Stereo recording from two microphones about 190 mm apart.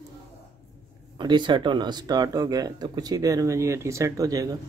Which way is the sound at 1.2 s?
25° right (ahead or behind).